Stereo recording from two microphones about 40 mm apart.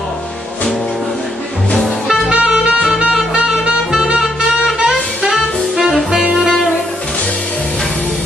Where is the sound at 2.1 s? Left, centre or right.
Right.